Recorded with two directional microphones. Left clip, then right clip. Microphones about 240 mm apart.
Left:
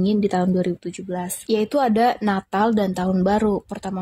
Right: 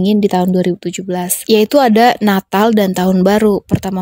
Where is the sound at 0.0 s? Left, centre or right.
Right.